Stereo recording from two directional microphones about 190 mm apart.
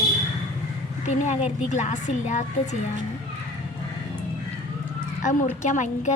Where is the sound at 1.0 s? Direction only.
40° left (ahead or behind).